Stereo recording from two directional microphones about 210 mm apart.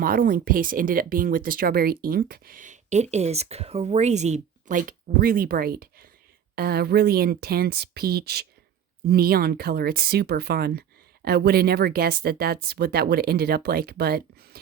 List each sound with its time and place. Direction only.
0.0 s speech: 45° right (ahead or behind)